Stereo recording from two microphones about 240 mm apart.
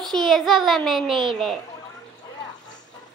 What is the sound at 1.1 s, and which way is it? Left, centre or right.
Speech, right.